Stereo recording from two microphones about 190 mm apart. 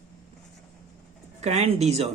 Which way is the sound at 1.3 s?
35° right (ahead or behind).